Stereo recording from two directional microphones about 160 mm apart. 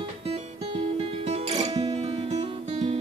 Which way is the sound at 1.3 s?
45° right (ahead or behind).